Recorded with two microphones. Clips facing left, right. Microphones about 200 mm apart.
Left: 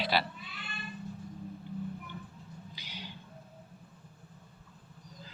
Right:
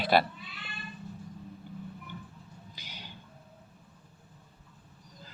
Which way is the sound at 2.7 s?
45° right (ahead or behind).